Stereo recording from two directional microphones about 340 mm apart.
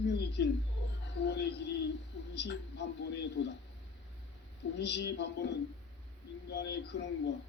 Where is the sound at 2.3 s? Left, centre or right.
Left.